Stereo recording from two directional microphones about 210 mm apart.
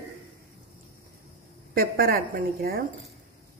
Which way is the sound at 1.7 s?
45° right (ahead or behind).